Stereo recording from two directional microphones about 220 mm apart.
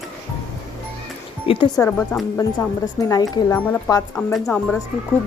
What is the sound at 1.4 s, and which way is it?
Speech, 25° left (ahead or behind).